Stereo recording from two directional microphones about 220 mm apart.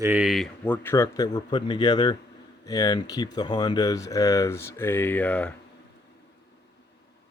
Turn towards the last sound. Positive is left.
turn(degrees=5)  # may be behind; listen again after turning